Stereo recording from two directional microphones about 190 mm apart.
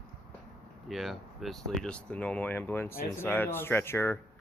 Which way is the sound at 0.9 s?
Centre (ahead or behind).